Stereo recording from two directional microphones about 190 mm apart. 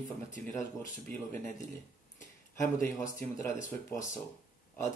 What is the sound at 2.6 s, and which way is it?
Speech, 15° left (ahead or behind).